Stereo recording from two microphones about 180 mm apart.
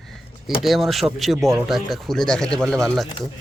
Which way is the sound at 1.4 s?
15° right (ahead or behind).